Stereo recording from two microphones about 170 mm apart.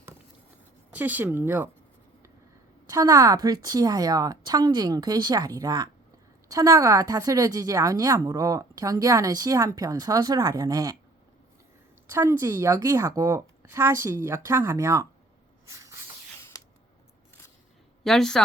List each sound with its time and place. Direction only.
0.9 s a woman's voice: 10° right (ahead or behind)
2.9 s a woman's voice: 20° right (ahead or behind)
12.0 s a woman's voice: 15° right (ahead or behind)
15.6 s hiss: 20° right (ahead or behind)
16.4 s creak: 20° left (ahead or behind)
18.0 s a woman's voice: 5° left (ahead or behind)